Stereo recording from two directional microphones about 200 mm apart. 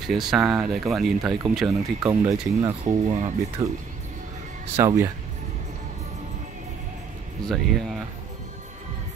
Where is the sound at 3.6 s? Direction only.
15° right (ahead or behind).